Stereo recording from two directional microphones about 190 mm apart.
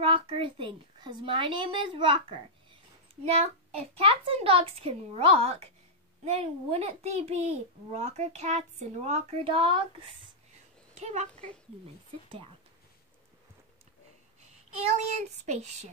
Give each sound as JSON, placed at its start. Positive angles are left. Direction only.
{"t": 0.0, "sound": "a woman's voice", "side_deg": -25}
{"t": 11.0, "sound": "a child's voice", "side_deg": -35}
{"t": 14.8, "sound": "a child's voice", "side_deg": -35}